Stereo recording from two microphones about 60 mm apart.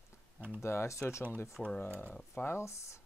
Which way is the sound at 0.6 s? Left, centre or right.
Left.